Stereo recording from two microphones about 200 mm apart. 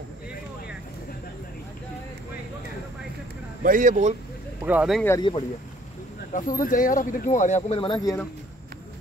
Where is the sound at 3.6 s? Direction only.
40° right (ahead or behind).